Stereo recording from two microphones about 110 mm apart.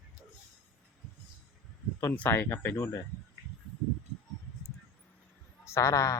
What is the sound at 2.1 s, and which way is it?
Speech, 20° left (ahead or behind).